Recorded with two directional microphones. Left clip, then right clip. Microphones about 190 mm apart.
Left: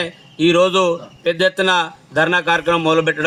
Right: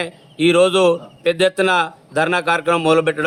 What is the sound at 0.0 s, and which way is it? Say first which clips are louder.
A man's voice: left 1 dB; 20° right (ahead or behind).